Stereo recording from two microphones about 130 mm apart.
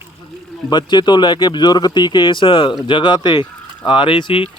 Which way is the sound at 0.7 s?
35° left (ahead or behind).